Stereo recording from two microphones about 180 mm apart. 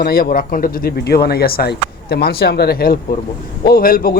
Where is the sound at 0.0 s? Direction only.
55° left (ahead or behind).